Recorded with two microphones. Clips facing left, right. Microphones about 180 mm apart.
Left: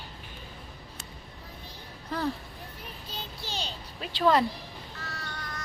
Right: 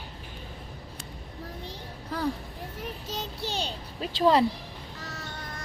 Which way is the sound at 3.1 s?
70° right (ahead or behind).